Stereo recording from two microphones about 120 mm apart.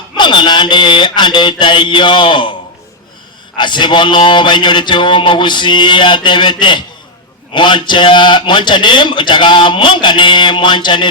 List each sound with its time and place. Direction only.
0.2 s a man's voice: 40° left (ahead or behind)
3.6 s a man's voice: 40° left (ahead or behind)